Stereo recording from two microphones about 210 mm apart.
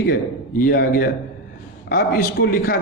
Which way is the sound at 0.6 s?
45° left (ahead or behind).